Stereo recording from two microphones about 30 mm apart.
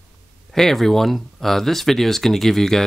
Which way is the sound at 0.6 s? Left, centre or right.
Centre.